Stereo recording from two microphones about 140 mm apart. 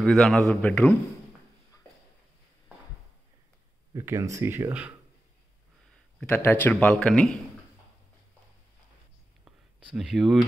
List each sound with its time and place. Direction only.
0.0 s a man's voice: 5° left (ahead or behind)
3.9 s speech: 20° right (ahead or behind)
6.1 s a man's voice: 15° left (ahead or behind)
9.9 s a man's voice: centre (ahead or behind)